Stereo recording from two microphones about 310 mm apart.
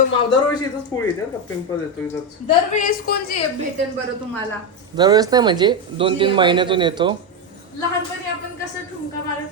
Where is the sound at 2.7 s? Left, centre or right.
Left.